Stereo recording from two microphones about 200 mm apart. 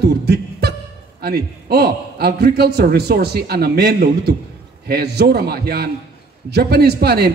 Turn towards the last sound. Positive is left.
turn(degrees=-55)  # may be behind; listen again after turning